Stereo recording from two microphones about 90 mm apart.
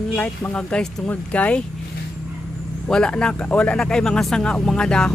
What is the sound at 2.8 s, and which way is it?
Speech, 10° left (ahead or behind).